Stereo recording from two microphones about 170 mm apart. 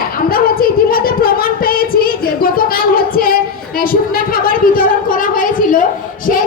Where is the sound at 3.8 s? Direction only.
60° left (ahead or behind).